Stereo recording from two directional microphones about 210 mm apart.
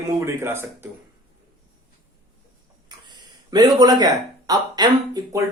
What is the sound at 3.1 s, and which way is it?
Speech, 20° right (ahead or behind).